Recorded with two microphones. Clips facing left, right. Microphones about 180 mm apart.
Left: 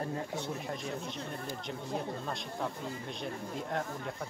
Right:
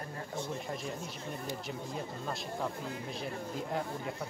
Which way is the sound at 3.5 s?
5° right (ahead or behind).